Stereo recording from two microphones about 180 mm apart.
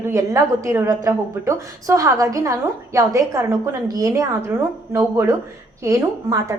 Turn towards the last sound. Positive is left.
turn(degrees=-15)  # may be behind; listen again after turning